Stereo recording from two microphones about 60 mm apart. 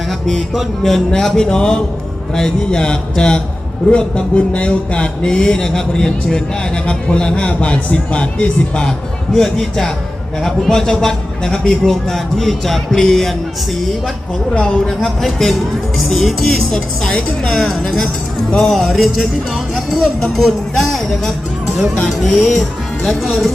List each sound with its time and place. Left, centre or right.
0.1 s a man's voice: centre
9.3 s a man's voice: centre
14.8 s speech: centre